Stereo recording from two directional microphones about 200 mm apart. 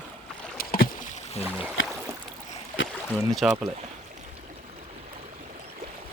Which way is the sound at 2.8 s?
70° left (ahead or behind).